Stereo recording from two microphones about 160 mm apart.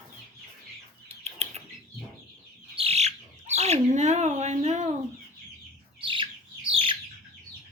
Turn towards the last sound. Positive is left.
turn(degrees=-35)  # may be behind; listen again after turning